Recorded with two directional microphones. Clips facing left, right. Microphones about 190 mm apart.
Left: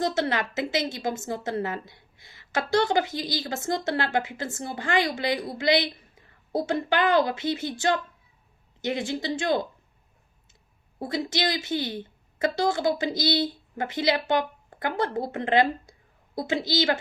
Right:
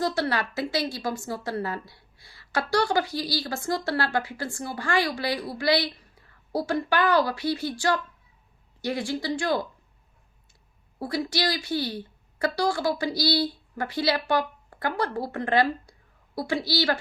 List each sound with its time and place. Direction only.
0.0 s a woman's voice: 20° left (ahead or behind)
11.0 s a woman's voice: 20° left (ahead or behind)